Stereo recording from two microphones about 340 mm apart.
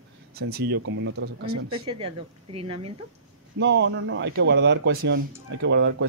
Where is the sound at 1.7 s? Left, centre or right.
Centre.